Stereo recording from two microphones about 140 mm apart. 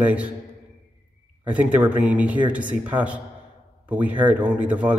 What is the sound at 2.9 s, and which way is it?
Speech, 30° right (ahead or behind).